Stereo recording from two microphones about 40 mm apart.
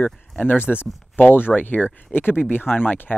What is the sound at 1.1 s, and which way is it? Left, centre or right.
Speech, left.